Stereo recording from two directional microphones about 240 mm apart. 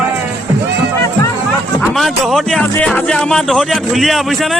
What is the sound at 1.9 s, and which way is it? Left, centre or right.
A man's voice, centre.